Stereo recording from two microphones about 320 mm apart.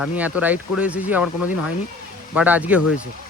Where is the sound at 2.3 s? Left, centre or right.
Centre.